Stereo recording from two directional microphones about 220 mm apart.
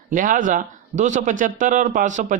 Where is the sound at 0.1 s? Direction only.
35° right (ahead or behind).